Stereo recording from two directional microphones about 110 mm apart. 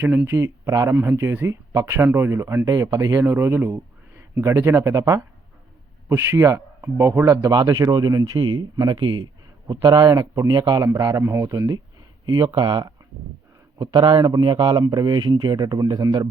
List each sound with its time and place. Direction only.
0.0 s speech: 20° right (ahead or behind); by 10.8 s 40° right (ahead or behind)
10.8 s speech: 30° right (ahead or behind)
12.2 s speech: 40° right (ahead or behind)